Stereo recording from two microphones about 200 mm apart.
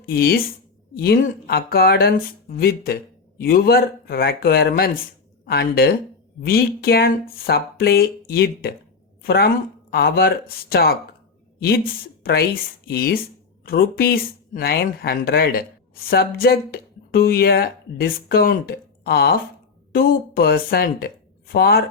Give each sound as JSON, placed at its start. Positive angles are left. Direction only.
{"t": 0.0, "sound": "speech", "side_deg": 50}
{"t": 12.2, "sound": "speech", "side_deg": 50}